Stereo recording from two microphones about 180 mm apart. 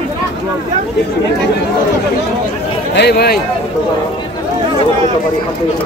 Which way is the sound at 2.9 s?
65° left (ahead or behind).